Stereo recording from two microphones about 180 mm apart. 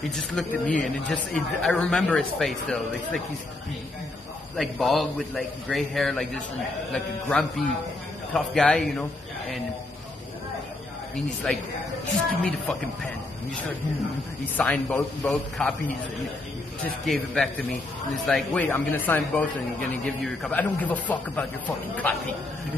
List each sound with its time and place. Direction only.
0.1 s speech: 5° left (ahead or behind)
4.6 s speech: centre (ahead or behind)
11.4 s speech: 5° left (ahead or behind)
14.4 s speech: 5° left (ahead or behind)
16.8 s speech: centre (ahead or behind)